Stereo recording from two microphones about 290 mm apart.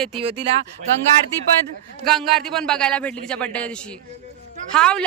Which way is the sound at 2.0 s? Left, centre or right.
Centre.